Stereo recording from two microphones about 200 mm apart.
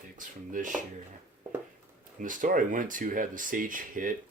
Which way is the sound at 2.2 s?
40° right (ahead or behind).